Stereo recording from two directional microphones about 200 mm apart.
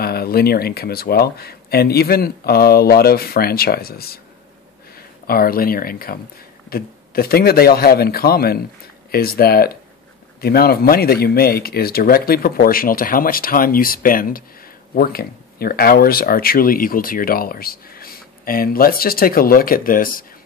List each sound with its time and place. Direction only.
0.0 s speech: 50° left (ahead or behind)